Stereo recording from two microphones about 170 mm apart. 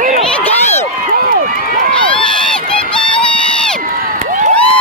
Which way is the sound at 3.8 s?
50° right (ahead or behind).